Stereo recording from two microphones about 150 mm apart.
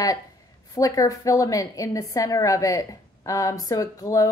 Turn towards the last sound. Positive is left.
turn(degrees=20)  # may be behind; listen again after turning